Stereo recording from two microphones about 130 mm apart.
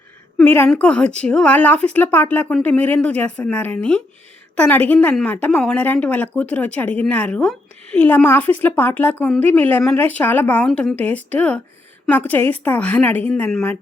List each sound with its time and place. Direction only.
0.3 s a woman's voice: 15° left (ahead or behind)
10.7 s a woman's voice: centre (ahead or behind)
10.9 s speech: 10° left (ahead or behind)